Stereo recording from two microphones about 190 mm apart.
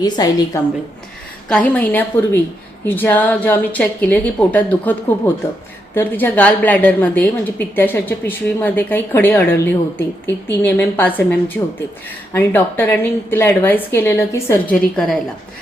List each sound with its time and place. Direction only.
0.0 s a woman's voice: 20° left (ahead or behind)
1.5 s a woman's voice: 5° left (ahead or behind)